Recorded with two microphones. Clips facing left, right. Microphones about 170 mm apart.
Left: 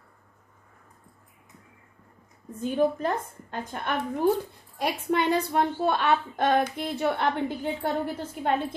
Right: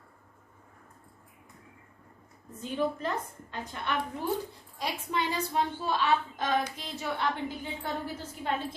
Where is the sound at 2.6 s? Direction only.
50° left (ahead or behind).